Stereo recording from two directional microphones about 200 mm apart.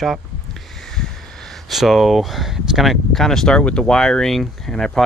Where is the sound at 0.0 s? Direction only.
Centre (ahead or behind).